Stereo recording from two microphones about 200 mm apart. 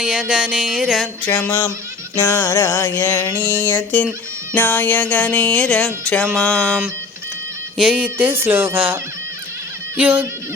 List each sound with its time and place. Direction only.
0.0 s music: 5° right (ahead or behind)
1.3 s music: 10° left (ahead or behind)
7.8 s fowl: 5° right (ahead or behind)
10.0 s fowl: 10° right (ahead or behind)